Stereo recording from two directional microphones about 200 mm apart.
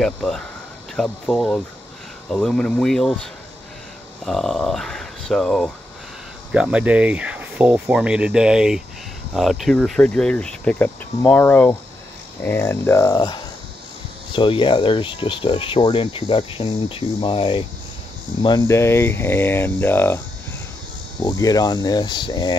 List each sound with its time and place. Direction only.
0.0 s speech: 5° left (ahead or behind)
21.2 s speech: 20° left (ahead or behind)